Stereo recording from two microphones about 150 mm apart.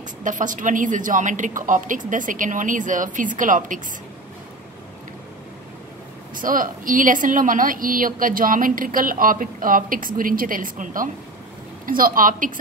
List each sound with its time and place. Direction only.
0.2 s a woman's voice: 60° right (ahead or behind)
6.3 s a woman's voice: 65° right (ahead or behind)